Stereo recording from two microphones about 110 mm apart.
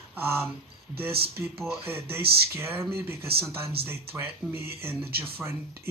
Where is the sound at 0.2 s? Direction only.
20° right (ahead or behind).